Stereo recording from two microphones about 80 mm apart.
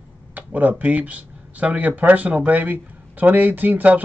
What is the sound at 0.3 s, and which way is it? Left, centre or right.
Speech, right.